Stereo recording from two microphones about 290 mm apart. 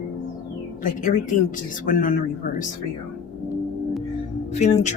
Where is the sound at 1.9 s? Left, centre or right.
Left.